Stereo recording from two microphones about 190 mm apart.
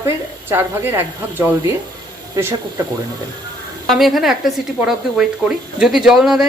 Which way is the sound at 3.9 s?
Centre (ahead or behind).